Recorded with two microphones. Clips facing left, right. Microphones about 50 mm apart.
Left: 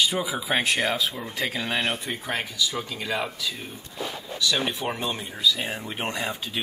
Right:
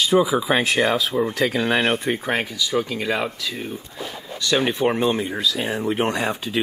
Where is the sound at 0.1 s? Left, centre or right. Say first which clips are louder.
Right 8 dB; right.